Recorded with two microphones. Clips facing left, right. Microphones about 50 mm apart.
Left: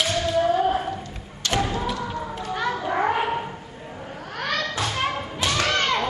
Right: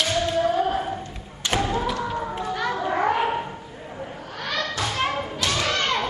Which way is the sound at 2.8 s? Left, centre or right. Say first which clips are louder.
Right 1 dB; centre.